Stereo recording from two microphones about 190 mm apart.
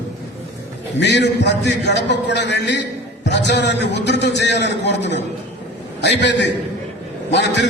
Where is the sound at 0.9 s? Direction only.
65° left (ahead or behind).